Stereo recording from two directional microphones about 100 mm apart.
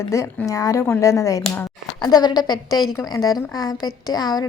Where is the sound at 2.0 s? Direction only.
45° left (ahead or behind).